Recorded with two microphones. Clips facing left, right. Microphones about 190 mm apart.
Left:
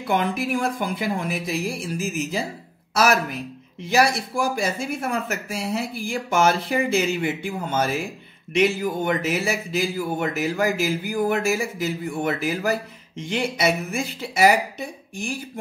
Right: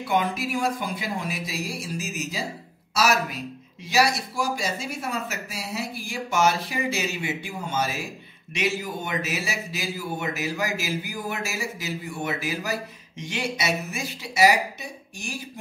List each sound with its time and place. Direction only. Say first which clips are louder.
0.0 s speech: left 2 dB; 55° left (ahead or behind)
2.9 s a sound: left 3 dB; 55° left (ahead or behind)
3.9 s speech: left 3 dB; 55° left (ahead or behind)